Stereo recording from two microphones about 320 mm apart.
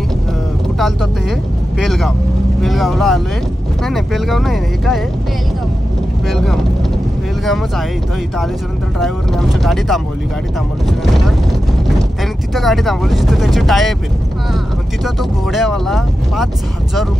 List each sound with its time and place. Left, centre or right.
1.8 s speech: centre
6.2 s speech: centre
9.0 s speech: centre
12.5 s speech: centre
15.5 s speech: centre